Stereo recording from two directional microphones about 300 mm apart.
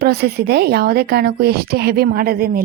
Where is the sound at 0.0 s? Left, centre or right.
Right.